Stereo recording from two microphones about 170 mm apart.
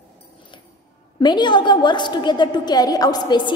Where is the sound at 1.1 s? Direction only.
25° left (ahead or behind).